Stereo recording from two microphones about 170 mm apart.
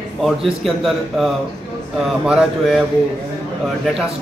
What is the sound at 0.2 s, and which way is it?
A man's voice, centre (ahead or behind).